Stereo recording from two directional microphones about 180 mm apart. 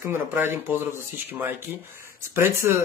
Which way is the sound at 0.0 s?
10° right (ahead or behind).